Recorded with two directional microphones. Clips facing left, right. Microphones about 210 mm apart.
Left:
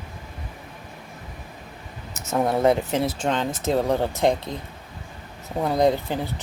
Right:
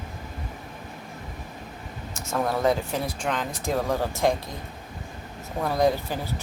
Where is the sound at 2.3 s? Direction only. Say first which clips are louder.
Left 4 dB; 25° left (ahead or behind).